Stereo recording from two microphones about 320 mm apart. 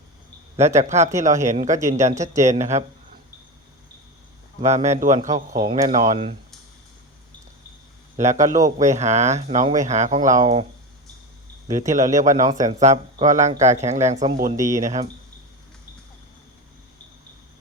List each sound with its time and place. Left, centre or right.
0.5 s speech: right
4.6 s speech: right
8.1 s speech: right
11.7 s speech: right